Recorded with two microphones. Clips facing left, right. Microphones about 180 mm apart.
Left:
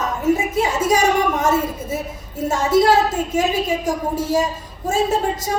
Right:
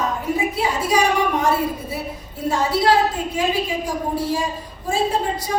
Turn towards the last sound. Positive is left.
turn(degrees=45)  # may be behind; listen again after turning